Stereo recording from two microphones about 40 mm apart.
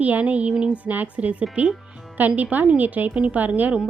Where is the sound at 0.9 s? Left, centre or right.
Right.